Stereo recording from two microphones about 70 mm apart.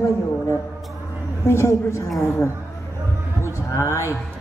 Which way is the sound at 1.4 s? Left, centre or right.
Left.